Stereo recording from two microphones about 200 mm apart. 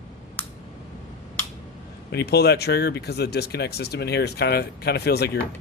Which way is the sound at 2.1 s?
55° left (ahead or behind).